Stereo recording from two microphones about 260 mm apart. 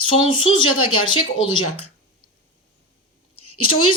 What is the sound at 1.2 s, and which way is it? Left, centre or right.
Speech, left.